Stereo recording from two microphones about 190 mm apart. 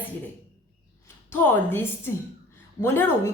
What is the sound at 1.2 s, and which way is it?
A woman's voice, 10° left (ahead or behind).